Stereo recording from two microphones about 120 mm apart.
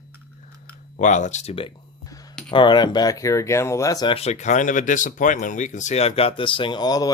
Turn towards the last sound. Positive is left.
turn(degrees=35)  # may be behind; listen again after turning